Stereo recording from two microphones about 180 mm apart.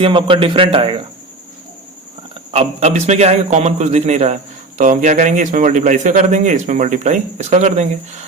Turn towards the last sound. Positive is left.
turn(degrees=-40)  # may be behind; listen again after turning